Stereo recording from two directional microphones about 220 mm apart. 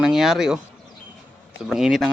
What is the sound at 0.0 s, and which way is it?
Speech, centre (ahead or behind).